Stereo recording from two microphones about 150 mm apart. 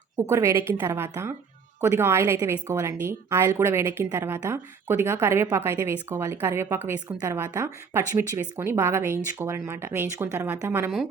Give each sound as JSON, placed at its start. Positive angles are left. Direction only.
{"t": 0.2, "sound": "a woman's voice", "side_deg": -20}